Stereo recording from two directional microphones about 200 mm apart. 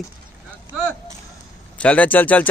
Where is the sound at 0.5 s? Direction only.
5° left (ahead or behind).